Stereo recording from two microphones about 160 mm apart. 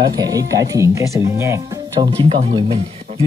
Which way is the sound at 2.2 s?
35° right (ahead or behind).